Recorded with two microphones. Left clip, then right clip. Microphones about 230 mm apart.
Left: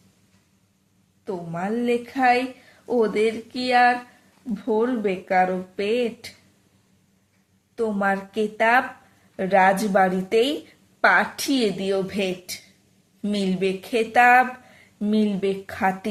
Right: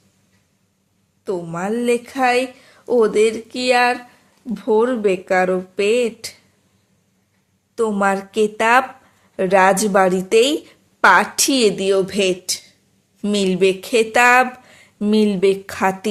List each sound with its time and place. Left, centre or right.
1.2 s a woman's voice: right
7.8 s a woman's voice: right